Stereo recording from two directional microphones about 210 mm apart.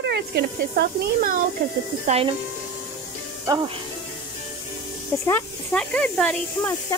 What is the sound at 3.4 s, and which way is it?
Speech, 15° right (ahead or behind).